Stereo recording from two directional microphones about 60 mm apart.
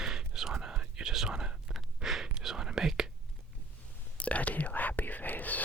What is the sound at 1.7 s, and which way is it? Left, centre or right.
Gasp, centre.